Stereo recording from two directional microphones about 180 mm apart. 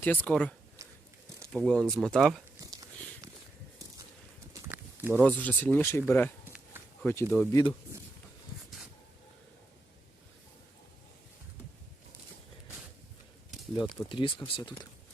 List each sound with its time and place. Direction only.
0.0 s speech: 10° left (ahead or behind)
0.8 s biting: 20° right (ahead or behind)
1.5 s speech: 5° left (ahead or behind)
4.7 s a sound: 10° right (ahead or behind)
5.1 s speech: 10° left (ahead or behind)
7.5 s speech: 20° left (ahead or behind)
14.1 s speech: 25° left (ahead or behind)